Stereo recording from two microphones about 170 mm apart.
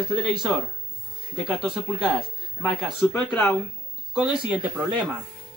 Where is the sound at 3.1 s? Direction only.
10° left (ahead or behind).